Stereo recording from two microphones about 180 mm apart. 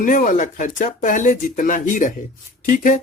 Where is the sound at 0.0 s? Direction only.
45° left (ahead or behind).